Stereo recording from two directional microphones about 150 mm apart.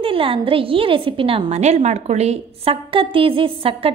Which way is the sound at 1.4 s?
50° right (ahead or behind).